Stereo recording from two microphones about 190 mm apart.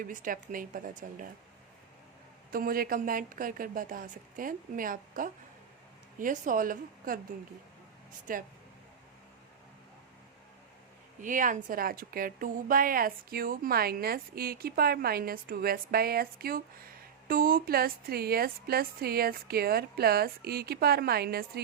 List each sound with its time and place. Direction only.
0.0 s a woman's voice: 45° right (ahead or behind)
2.5 s a woman's voice: 50° right (ahead or behind)
8.3 s a woman's voice: 45° right (ahead or behind)
11.2 s a woman's voice: 45° right (ahead or behind)